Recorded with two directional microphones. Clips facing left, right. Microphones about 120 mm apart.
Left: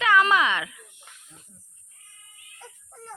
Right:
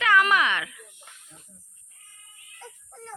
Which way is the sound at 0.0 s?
20° left (ahead or behind).